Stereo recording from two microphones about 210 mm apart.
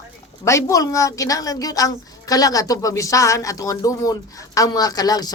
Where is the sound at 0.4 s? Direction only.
15° left (ahead or behind).